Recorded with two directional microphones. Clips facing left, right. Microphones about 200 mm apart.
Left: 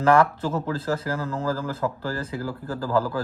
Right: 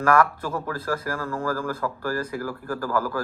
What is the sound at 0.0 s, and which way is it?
Speech, 25° left (ahead or behind).